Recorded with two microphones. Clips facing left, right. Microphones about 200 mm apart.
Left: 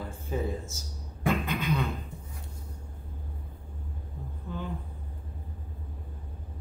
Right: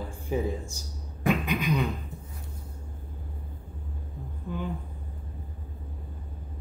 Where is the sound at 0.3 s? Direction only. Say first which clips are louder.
Right 3 dB; 15° right (ahead or behind).